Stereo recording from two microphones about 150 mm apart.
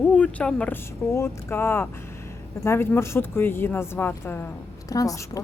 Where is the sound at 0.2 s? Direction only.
10° left (ahead or behind).